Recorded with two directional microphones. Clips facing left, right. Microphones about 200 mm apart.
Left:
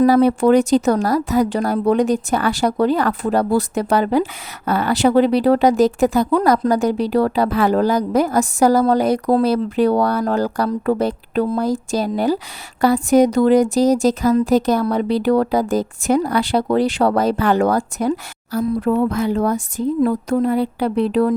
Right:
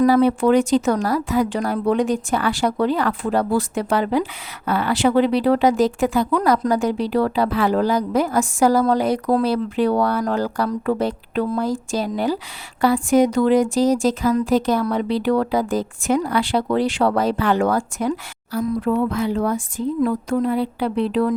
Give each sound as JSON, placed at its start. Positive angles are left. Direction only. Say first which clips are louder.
{"t": 0.0, "sound": "a woman's voice", "louder": "left 2 dB", "side_deg": 40}